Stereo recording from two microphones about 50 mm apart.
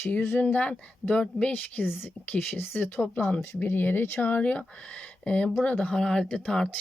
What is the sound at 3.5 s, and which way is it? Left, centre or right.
Speech, left.